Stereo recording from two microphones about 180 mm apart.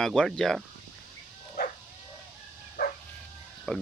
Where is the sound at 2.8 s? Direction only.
55° left (ahead or behind).